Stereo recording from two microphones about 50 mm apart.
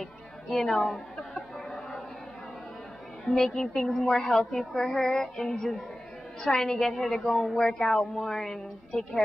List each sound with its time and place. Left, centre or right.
0.0 s music: centre
3.3 s a woman's voice: centre